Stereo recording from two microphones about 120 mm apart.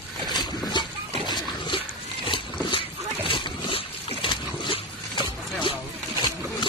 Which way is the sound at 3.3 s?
45° left (ahead or behind).